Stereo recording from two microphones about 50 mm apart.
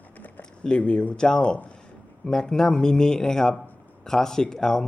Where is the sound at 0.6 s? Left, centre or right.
Left.